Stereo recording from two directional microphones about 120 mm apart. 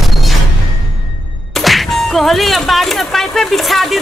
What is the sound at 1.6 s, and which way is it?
Speech, centre (ahead or behind).